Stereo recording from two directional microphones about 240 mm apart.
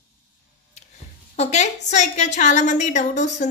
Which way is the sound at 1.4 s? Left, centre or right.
Left.